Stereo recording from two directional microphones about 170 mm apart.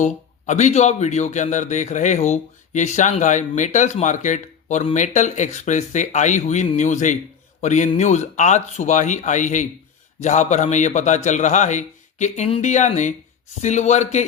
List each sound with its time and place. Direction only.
0.0 s speech: 45° left (ahead or behind)